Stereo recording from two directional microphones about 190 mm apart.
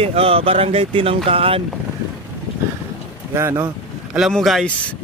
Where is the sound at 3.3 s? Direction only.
15° right (ahead or behind).